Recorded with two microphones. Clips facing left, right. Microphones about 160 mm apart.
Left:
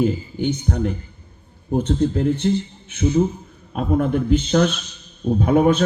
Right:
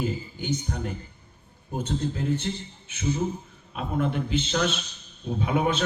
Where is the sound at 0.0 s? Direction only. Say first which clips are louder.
Left 10 dB; 55° left (ahead or behind).